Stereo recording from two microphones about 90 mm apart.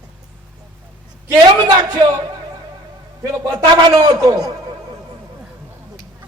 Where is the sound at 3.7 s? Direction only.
45° right (ahead or behind).